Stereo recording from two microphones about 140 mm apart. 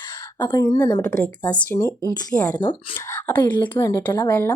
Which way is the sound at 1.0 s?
10° left (ahead or behind).